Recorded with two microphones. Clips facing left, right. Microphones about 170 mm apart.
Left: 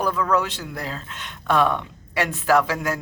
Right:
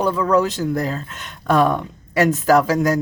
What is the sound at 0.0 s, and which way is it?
Speech, 30° right (ahead or behind).